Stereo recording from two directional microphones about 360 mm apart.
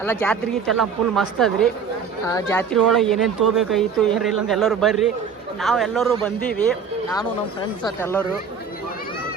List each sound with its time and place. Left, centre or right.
0.0 s speech: centre
7.9 s speech: centre